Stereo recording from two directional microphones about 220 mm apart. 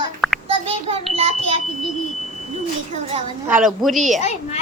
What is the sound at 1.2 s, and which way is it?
Speech, 25° right (ahead or behind).